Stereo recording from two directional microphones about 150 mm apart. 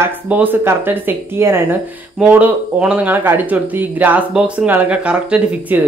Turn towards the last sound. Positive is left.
turn(degrees=-10)  # may be behind; listen again after turning